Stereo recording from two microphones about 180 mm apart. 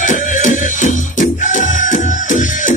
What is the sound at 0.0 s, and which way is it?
Music, 45° left (ahead or behind).